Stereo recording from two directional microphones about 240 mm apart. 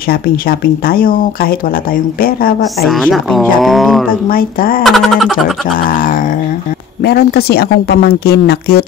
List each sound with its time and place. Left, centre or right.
0.1 s speech: left
2.8 s speech: centre
4.3 s speech: left
4.8 s speech: centre
5.9 s speech: left